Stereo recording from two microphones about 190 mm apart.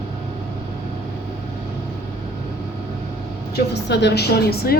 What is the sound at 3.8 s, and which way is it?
Speech, 65° left (ahead or behind).